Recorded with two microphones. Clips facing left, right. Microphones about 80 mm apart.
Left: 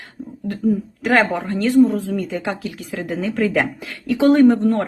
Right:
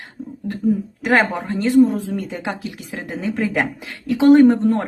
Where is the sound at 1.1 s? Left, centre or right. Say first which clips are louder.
Even; right.